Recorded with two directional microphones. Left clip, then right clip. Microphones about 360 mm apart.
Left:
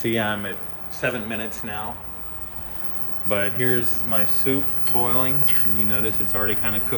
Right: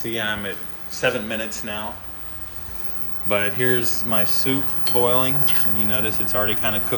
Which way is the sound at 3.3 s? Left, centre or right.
Centre.